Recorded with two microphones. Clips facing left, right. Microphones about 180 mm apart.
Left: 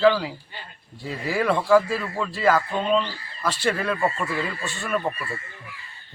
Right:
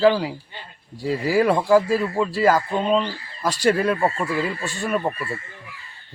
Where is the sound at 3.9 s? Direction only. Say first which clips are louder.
Right 3 dB; 20° right (ahead or behind).